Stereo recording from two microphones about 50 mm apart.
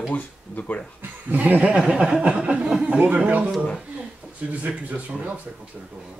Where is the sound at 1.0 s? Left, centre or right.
Right.